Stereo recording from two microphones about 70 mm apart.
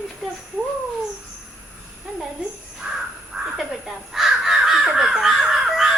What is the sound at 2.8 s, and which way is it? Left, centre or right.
Crow, centre.